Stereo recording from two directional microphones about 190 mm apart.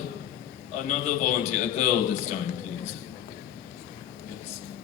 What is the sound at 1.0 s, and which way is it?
A man's voice, 40° left (ahead or behind).